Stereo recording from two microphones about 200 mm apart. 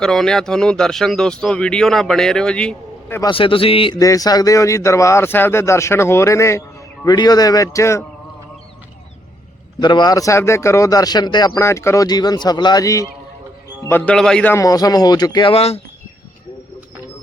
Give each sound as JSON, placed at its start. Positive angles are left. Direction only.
{"t": 0.0, "sound": "speech", "side_deg": 0}
{"t": 3.2, "sound": "a man's voice", "side_deg": 25}
{"t": 9.8, "sound": "a man's voice", "side_deg": 20}